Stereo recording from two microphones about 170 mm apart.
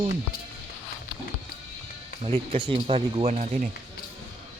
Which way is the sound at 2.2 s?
30° right (ahead or behind).